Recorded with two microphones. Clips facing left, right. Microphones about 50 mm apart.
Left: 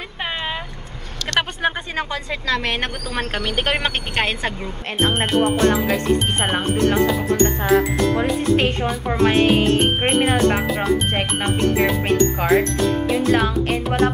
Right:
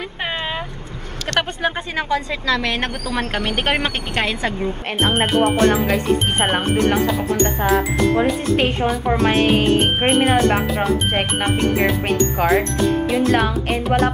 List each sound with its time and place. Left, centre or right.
3.3 s speech: right
3.8 s a woman's voice: left
5.0 s speech: centre
6.5 s speech: centre
7.6 s speech: centre